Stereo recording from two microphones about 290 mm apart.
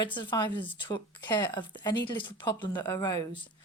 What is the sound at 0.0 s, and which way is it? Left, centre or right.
Speech, centre.